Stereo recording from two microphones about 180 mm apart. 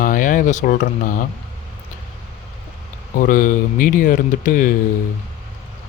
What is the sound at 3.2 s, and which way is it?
Speech, 50° left (ahead or behind).